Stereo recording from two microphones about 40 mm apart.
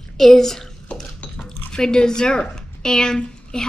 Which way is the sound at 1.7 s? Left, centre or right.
Centre.